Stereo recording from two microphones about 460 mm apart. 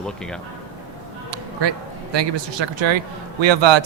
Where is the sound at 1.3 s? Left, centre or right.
Right.